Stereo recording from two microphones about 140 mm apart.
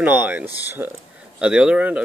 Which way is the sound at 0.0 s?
10° right (ahead or behind).